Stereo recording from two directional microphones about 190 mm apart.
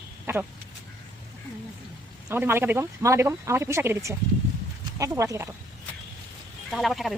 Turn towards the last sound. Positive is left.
turn(degrees=0)  # may be behind; listen again after turning